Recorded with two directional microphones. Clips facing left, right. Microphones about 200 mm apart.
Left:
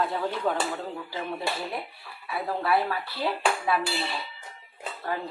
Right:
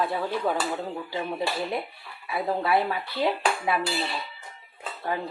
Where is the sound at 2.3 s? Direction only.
15° right (ahead or behind).